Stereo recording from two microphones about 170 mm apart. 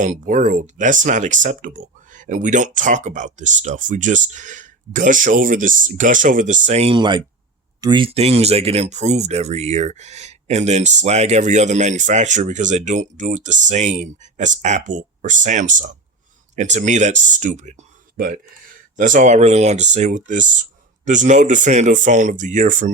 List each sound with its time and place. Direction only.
0.0 s speech: 50° right (ahead or behind)